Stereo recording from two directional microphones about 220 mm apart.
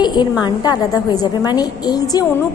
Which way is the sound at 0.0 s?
20° left (ahead or behind).